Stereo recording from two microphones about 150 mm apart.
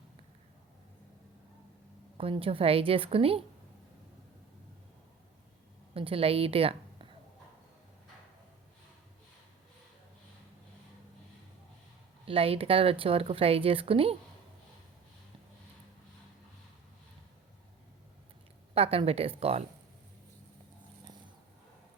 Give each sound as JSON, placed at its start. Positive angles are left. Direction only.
{"t": 2.1, "sound": "speech", "side_deg": -40}
{"t": 5.9, "sound": "a woman's voice", "side_deg": -40}
{"t": 12.2, "sound": "speech", "side_deg": -40}
{"t": 18.7, "sound": "speech", "side_deg": -40}